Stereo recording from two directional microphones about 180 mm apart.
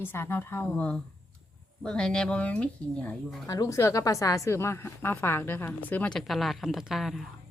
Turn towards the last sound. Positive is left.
turn(degrees=0)  # may be behind; listen again after turning